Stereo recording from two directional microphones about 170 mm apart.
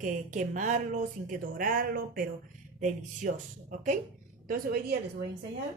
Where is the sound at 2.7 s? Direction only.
45° right (ahead or behind).